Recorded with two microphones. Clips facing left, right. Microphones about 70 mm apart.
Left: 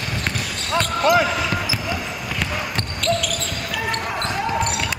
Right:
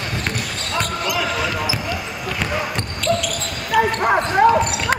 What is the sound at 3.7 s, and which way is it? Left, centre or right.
Basketball bounce, right.